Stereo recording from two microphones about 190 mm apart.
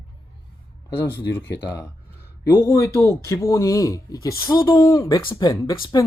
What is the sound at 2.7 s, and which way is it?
Speech, 15° left (ahead or behind).